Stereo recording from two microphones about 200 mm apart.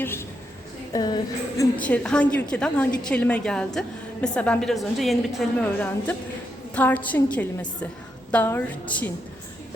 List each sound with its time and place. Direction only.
0.0 s a sound: 10° left (ahead or behind)
0.9 s music: 20° left (ahead or behind)
1.8 s a woman's voice: 5° left (ahead or behind)